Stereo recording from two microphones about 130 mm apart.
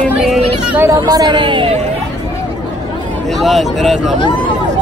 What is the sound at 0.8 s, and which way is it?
Speech, 30° right (ahead or behind).